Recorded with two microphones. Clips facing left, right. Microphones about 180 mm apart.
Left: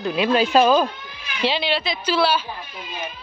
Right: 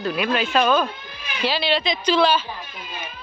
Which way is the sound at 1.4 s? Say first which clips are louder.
Left 1 dB; 20° left (ahead or behind).